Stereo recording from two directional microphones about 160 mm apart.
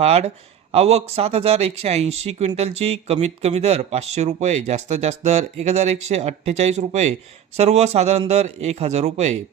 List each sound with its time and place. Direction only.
0.0 s speech: 40° right (ahead or behind)